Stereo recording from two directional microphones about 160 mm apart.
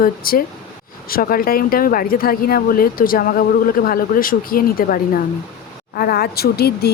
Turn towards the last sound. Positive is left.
turn(degrees=80)